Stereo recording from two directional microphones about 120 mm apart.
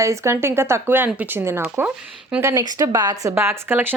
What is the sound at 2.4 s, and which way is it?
Speech, 30° right (ahead or behind).